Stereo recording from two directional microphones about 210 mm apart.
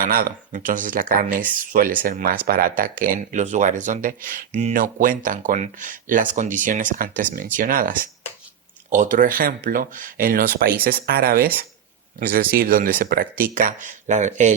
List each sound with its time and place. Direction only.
0.0 s speech: 45° right (ahead or behind)